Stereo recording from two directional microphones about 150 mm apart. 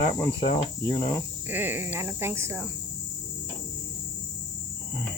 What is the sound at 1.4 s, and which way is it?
Speech, 15° right (ahead or behind).